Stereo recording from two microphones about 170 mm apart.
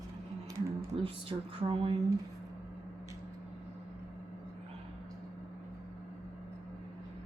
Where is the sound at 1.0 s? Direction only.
35° right (ahead or behind).